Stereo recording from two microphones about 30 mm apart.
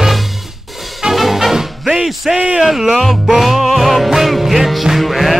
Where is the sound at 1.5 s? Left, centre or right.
Centre.